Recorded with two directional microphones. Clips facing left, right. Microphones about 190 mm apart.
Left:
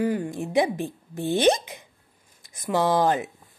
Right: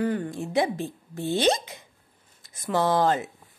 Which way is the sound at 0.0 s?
10° left (ahead or behind).